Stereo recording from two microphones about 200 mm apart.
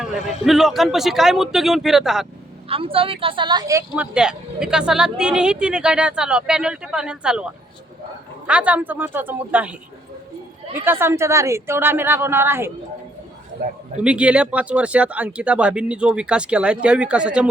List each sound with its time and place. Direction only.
0.4 s speech: centre (ahead or behind)
2.6 s a woman's voice: 25° right (ahead or behind); by 9.7 s 10° right (ahead or behind)
10.8 s a woman's voice: 10° right (ahead or behind)
13.6 s a man's voice: 45° right (ahead or behind)
14.0 s speech: 5° right (ahead or behind)